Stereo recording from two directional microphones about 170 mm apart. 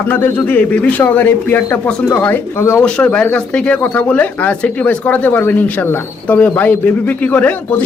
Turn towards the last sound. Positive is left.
turn(degrees=10)  # may be behind; listen again after turning